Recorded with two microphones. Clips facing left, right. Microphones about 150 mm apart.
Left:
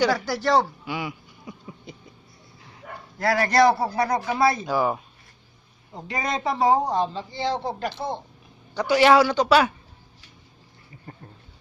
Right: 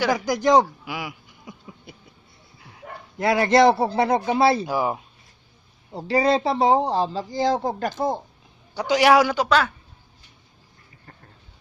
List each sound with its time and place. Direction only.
0.1 s speech: 15° right (ahead or behind)
3.2 s a man's voice: 20° right (ahead or behind)
4.6 s a man's voice: 10° right (ahead or behind)
5.9 s speech: 30° right (ahead or behind)
8.7 s a man's voice: 15° right (ahead or behind)